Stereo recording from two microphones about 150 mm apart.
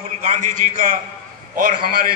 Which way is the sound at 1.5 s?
65° right (ahead or behind).